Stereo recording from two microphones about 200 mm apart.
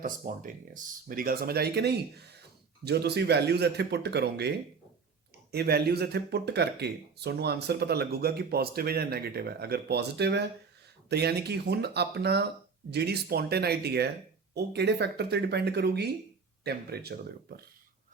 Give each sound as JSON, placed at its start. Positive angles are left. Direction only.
{"t": 0.0, "sound": "speech", "side_deg": -40}